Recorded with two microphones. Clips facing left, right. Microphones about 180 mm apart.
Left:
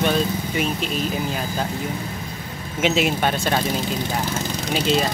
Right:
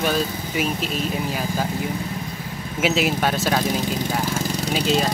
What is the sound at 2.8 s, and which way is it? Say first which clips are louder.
A man's voice: left 1 dB; centre (ahead or behind).